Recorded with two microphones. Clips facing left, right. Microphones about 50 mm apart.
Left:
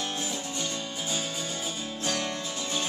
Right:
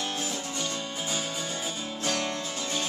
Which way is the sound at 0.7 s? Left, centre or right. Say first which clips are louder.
Right 1 dB; centre.